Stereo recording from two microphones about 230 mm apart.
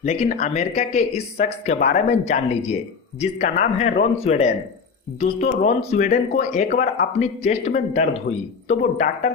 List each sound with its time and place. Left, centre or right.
0.0 s speech: left